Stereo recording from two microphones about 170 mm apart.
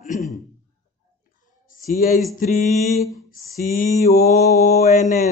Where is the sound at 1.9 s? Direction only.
45° left (ahead or behind).